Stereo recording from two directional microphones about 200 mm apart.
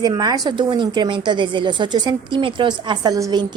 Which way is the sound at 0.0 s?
20° right (ahead or behind).